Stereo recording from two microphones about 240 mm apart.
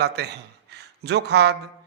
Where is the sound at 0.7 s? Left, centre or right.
Right.